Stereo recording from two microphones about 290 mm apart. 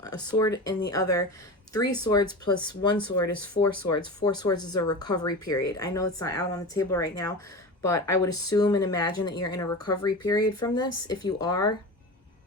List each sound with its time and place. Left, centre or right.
0.3 s speech: centre
1.8 s speech: left
2.0 s speech: centre